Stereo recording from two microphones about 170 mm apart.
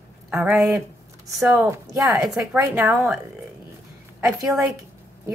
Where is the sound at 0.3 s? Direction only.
10° right (ahead or behind).